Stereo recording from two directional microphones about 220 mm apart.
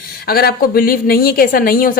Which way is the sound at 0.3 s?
45° left (ahead or behind).